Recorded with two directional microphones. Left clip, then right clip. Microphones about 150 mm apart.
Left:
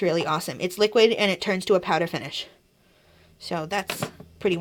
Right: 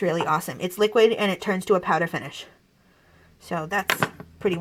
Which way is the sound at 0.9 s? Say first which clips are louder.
Even; 10° left (ahead or behind).